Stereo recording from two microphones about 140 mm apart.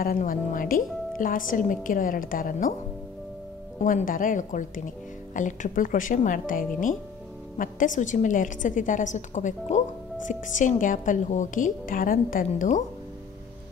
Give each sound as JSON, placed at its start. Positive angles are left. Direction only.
{"t": 0.0, "sound": "a woman's voice", "side_deg": 90}
{"t": 3.8, "sound": "a woman's voice", "side_deg": 75}